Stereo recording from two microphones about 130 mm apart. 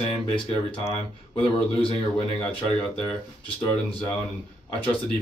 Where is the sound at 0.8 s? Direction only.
15° left (ahead or behind).